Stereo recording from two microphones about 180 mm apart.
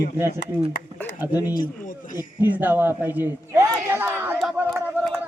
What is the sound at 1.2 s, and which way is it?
Speech, 10° right (ahead or behind).